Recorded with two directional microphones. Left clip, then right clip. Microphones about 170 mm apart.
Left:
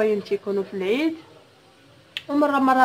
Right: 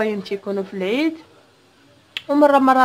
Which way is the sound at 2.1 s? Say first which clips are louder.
Right 7 dB; 30° right (ahead or behind).